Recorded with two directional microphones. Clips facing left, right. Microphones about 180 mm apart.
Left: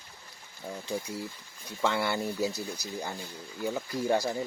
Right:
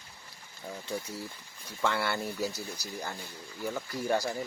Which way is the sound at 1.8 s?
15° left (ahead or behind).